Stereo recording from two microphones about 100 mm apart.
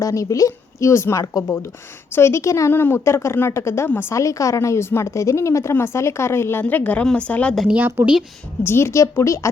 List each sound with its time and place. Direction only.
0.0 s a woman's voice: 35° left (ahead or behind); by 7.5 s 10° left (ahead or behind)
7.5 s speech: centre (ahead or behind)
7.8 s a woman's voice: 20° right (ahead or behind)
8.6 s a woman's voice: 25° left (ahead or behind)